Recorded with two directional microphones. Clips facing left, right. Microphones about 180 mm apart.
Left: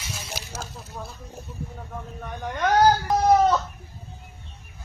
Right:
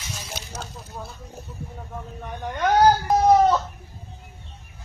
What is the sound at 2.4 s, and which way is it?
Speech, centre (ahead or behind).